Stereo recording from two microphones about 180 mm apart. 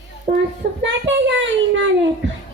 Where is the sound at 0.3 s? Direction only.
85° right.